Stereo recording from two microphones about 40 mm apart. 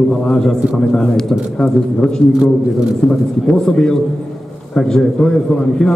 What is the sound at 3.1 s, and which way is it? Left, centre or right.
A man's voice, left.